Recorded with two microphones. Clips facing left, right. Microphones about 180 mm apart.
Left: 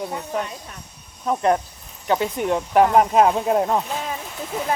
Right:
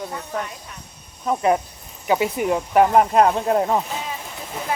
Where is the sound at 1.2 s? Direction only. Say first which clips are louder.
Even; 5° right (ahead or behind).